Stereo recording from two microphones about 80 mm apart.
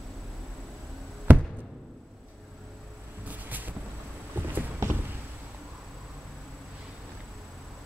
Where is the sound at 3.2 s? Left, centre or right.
Right.